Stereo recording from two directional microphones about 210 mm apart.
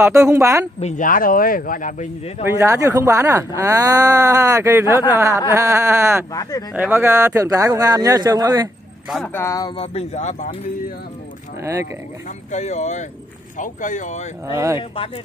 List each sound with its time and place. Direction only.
0.0 s speech: 15° right (ahead or behind)
0.7 s speech: 35° left (ahead or behind)
2.4 s speech: 15° right (ahead or behind)
9.1 s speech: 10° left (ahead or behind); by 10.5 s 35° left (ahead or behind)
11.6 s speech: 15° right (ahead or behind)
12.4 s speech: 35° left (ahead or behind)
14.5 s speech: 15° right (ahead or behind)